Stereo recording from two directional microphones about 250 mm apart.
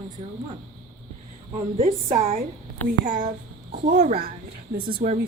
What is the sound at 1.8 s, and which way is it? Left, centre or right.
A woman's voice, right.